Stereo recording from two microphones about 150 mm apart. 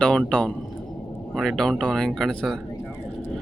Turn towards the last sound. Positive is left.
turn(degrees=15)  # may be behind; listen again after turning